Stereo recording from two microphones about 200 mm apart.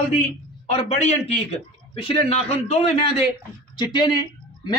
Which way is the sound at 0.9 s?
35° left (ahead or behind).